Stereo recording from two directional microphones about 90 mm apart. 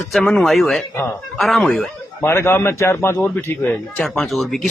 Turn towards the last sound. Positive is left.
turn(degrees=0)  # may be behind; listen again after turning